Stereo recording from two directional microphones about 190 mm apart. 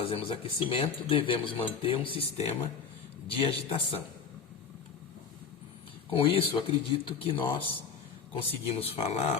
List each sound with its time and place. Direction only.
0.0 s speech: 30° left (ahead or behind)
6.1 s speech: 30° left (ahead or behind)